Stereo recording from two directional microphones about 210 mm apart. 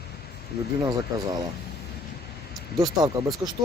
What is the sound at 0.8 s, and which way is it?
Speech, 20° right (ahead or behind).